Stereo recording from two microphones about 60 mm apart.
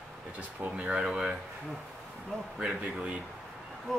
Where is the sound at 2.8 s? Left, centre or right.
Centre.